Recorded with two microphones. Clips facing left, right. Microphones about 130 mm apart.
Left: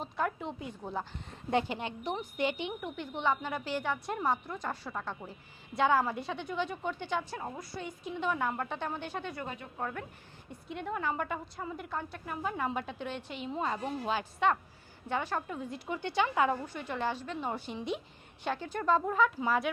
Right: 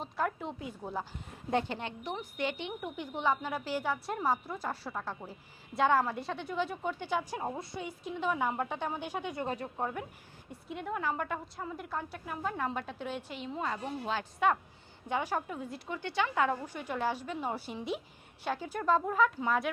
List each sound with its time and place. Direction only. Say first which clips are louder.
0.0 s a woman's voice: even; centre (ahead or behind)
1.6 s a woman's voice: left 2 dB; 15° left (ahead or behind)
2.8 s a woman's voice: right 1 dB; 10° right (ahead or behind)
7.3 s a woman's voice: right 3 dB; 25° right (ahead or behind)
7.8 s a woman's voice: even; 5° right (ahead or behind)
9.3 s speech: right 5 dB; 30° right (ahead or behind)
9.7 s a woman's voice: right 2 dB; 15° right (ahead or behind)
10.7 s a woman's voice: even; centre (ahead or behind)
13.5 s a woman's voice: left 2 dB; 20° left (ahead or behind)
14.3 s a woman's voice: right 2 dB; 5° right (ahead or behind)
15.9 s a woman's voice: left 2 dB; 15° left (ahead or behind)
16.6 s a woman's voice: right 1 dB; 10° right (ahead or behind)